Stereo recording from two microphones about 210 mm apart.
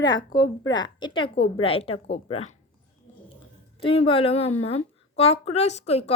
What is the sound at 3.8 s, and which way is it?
Speech, 25° left (ahead or behind).